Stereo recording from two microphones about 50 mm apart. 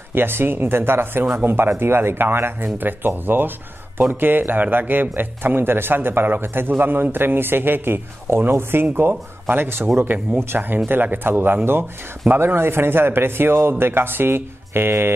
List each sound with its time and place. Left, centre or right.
0.1 s speech: right